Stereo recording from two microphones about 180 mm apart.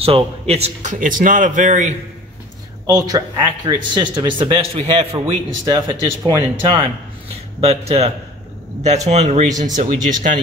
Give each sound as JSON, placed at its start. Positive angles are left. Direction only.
{"t": 0.0, "sound": "a man's voice", "side_deg": -35}
{"t": 2.9, "sound": "a man's voice", "side_deg": -20}